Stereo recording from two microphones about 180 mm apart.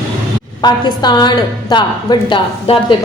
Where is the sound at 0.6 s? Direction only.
25° left (ahead or behind).